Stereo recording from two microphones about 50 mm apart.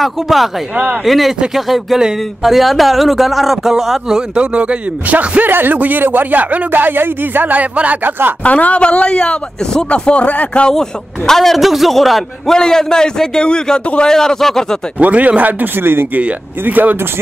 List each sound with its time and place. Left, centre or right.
0.0 s a man's voice: centre
4.4 s speech: right
8.5 s a man's voice: left
10.7 s a man's voice: centre
15.0 s speech: right
16.2 s speech: right